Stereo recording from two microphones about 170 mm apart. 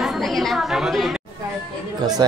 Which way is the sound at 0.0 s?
Centre (ahead or behind).